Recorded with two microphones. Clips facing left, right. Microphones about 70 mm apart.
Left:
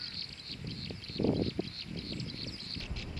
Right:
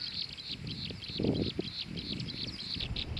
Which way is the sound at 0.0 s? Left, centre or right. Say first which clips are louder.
Right 1 dB; left.